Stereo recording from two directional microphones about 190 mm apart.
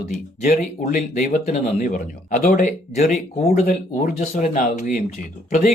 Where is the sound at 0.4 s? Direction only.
45° left (ahead or behind).